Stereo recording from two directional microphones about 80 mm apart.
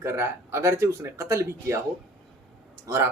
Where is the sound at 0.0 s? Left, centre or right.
Right.